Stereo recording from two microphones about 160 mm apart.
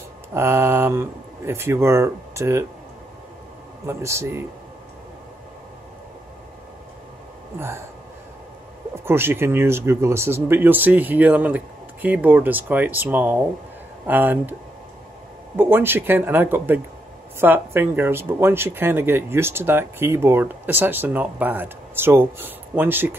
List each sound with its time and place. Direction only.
0.3 s speech: 15° right (ahead or behind)
3.8 s speech: 15° right (ahead or behind)
7.5 s speech: 15° right (ahead or behind)
8.9 s speech: 15° right (ahead or behind)
15.5 s speech: 15° right (ahead or behind)